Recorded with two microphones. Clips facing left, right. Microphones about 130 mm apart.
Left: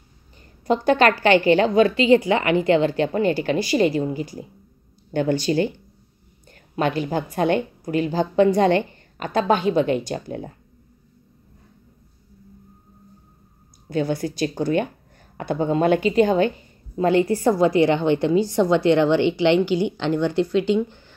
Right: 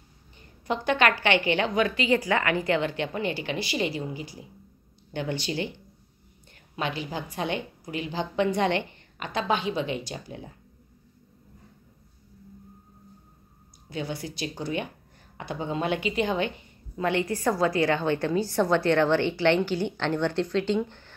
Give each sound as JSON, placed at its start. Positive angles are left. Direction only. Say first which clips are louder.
{"t": 0.7, "sound": "a woman's voice", "louder": "left 7 dB", "side_deg": 35}
{"t": 6.7, "sound": "a woman's voice", "louder": "left 9 dB", "side_deg": 50}
{"t": 13.8, "sound": "a woman's voice", "louder": "left 10 dB", "side_deg": 50}
{"t": 16.9, "sound": "a woman's voice", "louder": "left 8 dB", "side_deg": 30}